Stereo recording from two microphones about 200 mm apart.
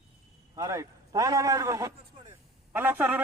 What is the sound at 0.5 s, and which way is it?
A man's voice, 15° right (ahead or behind).